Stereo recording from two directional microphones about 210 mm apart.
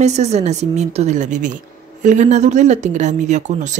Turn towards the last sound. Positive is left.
turn(degrees=-35)  # may be behind; listen again after turning